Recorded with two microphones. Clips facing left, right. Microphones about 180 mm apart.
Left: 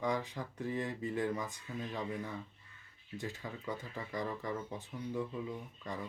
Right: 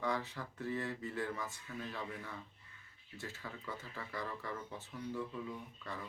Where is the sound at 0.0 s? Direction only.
15° left (ahead or behind).